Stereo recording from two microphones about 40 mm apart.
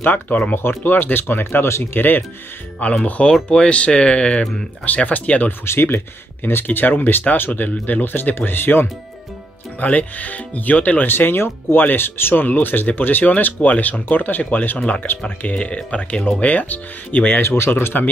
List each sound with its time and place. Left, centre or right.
0.0 s speech: left
0.6 s speech: left
1.3 s speech: left
2.8 s speech: left
4.8 s speech: left
5.7 s speech: left
9.8 s speech: left
11.1 s speech: left
11.8 s speech: left
14.4 s speech: left
15.5 s speech: left
17.4 s speech: left
17.6 s speech: left